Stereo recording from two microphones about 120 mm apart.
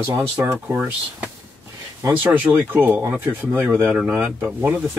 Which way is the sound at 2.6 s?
15° right (ahead or behind).